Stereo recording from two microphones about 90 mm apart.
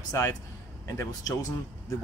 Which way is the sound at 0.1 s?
35° left (ahead or behind).